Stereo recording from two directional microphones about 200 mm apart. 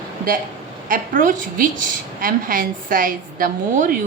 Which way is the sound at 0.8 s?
45° right (ahead or behind).